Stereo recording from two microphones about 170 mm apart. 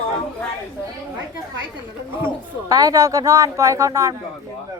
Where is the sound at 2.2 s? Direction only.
20° right (ahead or behind).